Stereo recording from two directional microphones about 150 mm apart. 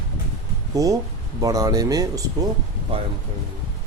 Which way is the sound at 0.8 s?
20° right (ahead or behind).